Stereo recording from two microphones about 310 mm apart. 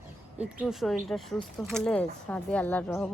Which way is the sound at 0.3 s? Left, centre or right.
Centre.